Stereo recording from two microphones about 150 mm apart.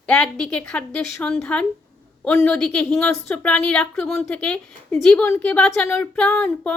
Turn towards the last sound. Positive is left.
turn(degrees=5)  # may be behind; listen again after turning